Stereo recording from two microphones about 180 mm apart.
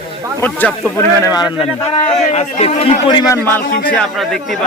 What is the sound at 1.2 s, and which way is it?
Speech, 20° left (ahead or behind).